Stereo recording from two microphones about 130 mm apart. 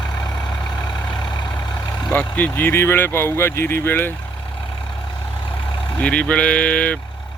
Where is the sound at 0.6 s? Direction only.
30° left (ahead or behind).